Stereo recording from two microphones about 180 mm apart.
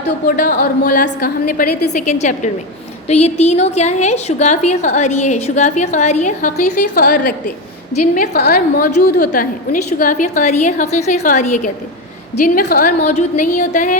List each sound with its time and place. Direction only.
0.0 s a woman's voice: 50° left (ahead or behind)
12.5 s a woman's voice: 55° left (ahead or behind)